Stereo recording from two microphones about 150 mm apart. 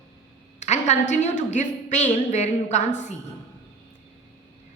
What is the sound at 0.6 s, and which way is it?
A woman's voice, 50° left (ahead or behind).